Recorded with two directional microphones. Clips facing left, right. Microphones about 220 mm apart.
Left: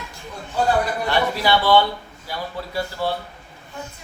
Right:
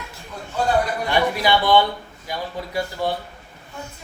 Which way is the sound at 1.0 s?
15° right (ahead or behind).